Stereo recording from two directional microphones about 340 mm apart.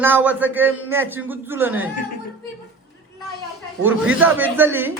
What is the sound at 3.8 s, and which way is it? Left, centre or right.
A man's voice, centre.